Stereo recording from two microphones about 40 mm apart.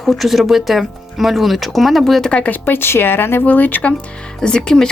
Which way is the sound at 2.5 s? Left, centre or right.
Left.